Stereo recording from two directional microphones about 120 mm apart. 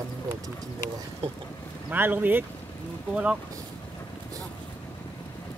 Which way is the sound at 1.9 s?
15° right (ahead or behind).